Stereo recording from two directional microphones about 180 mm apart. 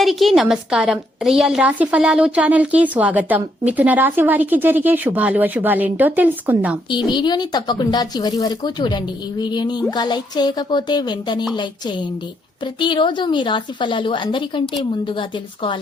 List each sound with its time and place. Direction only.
0.0 s a woman's voice: centre (ahead or behind)
6.9 s speech: 25° left (ahead or behind)